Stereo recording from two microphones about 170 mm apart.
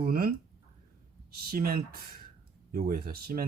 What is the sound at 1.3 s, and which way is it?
Speech, 60° right (ahead or behind).